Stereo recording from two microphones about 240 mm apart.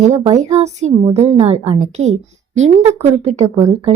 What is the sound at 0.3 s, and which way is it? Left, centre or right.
A woman's voice, right.